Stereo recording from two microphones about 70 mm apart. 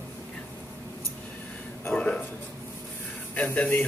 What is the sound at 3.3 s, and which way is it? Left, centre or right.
Speech, centre.